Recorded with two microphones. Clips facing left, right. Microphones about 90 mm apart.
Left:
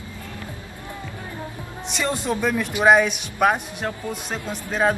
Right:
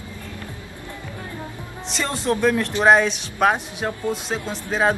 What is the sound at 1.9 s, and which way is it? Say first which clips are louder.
Speech: right 1 dB; 5° left (ahead or behind).